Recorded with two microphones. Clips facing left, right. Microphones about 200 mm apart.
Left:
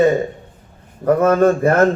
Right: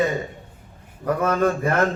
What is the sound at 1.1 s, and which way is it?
Speech, 50° left (ahead or behind).